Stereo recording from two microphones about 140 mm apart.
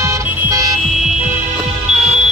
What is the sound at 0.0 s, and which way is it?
Car alarm, 20° right (ahead or behind).